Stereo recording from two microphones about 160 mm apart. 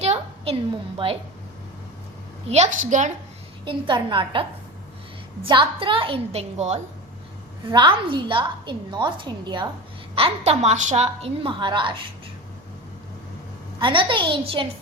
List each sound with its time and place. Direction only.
0.0 s a sound: 40° right (ahead or behind)
2.5 s a woman's voice: 45° right (ahead or behind)
3.7 s a woman's voice: 30° right (ahead or behind)
7.7 s a woman's voice: 30° right (ahead or behind)
13.7 s a woman's voice: 30° right (ahead or behind)